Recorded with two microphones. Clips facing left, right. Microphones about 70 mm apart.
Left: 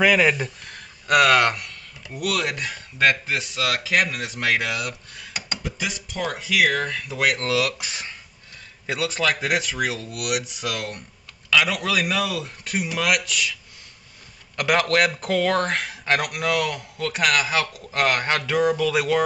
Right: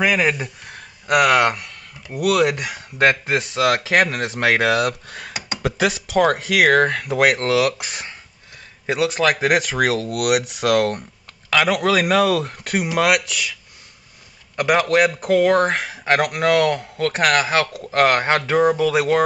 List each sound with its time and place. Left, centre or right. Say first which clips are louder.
0.0 s speech: even; centre
2.1 s speech: right 6 dB; right
3.0 s speech: right 3 dB; right
3.3 s speech: right 7 dB; right
4.4 s speech: right 7 dB; right
5.6 s speech: right 13 dB; right
7.2 s speech: right 4 dB; right
8.8 s speech: right 5 dB; right
9.4 s speech: right 6 dB; right
11.5 s speech: right 4 dB; right
13.3 s speech: even; right
14.6 s speech: right 4 dB; centre
16.3 s speech: right 7 dB; right
18.0 s speech: right 5 dB; right